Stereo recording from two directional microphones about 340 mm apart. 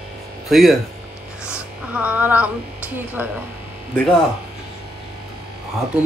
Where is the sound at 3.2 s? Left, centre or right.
Centre.